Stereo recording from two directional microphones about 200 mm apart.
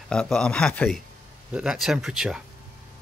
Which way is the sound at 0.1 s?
5° left (ahead or behind).